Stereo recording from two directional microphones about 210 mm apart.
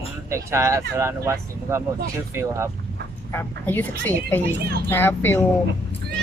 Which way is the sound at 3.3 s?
10° left (ahead or behind).